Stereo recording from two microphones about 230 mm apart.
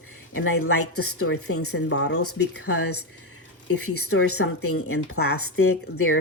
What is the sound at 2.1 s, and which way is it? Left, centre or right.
Speech, left.